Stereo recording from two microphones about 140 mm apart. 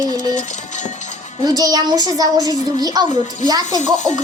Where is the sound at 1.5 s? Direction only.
25° right (ahead or behind).